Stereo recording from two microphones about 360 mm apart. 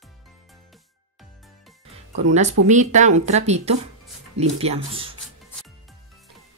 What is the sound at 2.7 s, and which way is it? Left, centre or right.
Speech, centre.